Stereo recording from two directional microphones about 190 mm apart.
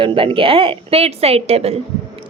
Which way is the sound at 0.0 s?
25° right (ahead or behind).